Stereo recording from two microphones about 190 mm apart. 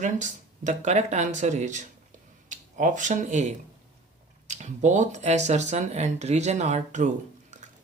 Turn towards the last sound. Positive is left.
turn(degrees=-40)  # may be behind; listen again after turning